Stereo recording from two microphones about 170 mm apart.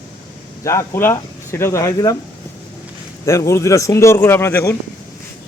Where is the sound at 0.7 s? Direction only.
15° left (ahead or behind).